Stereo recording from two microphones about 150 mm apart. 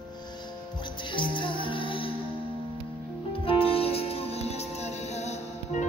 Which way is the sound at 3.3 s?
40° left (ahead or behind).